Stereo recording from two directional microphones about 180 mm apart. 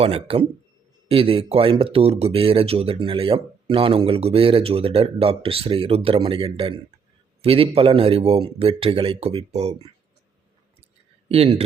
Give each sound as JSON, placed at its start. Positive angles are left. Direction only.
{"t": 0.0, "sound": "speech", "side_deg": -30}
{"t": 11.3, "sound": "speech", "side_deg": -35}